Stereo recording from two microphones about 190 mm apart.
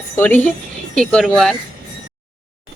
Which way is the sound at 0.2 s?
10° left (ahead or behind).